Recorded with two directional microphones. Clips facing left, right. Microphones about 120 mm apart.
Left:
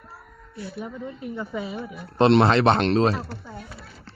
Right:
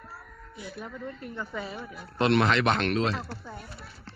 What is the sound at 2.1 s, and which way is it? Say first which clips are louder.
Speech: left 6 dB; 30° left (ahead or behind).